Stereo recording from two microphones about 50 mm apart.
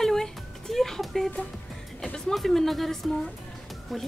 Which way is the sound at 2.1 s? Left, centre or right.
Centre.